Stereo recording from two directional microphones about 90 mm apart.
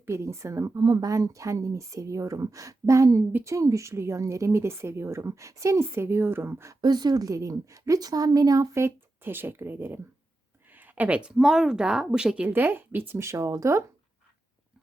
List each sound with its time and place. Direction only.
0.0 s speech: 30° right (ahead or behind)
6.8 s a woman's voice: 50° right (ahead or behind); by 12.5 s 10° right (ahead or behind)
12.5 s speech: 25° right (ahead or behind)